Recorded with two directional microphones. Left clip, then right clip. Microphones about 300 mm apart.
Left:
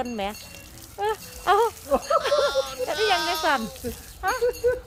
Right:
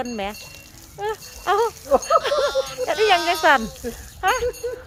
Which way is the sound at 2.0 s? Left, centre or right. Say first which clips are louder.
Right 3 dB; centre.